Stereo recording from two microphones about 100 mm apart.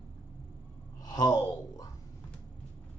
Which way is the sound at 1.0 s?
45° left (ahead or behind).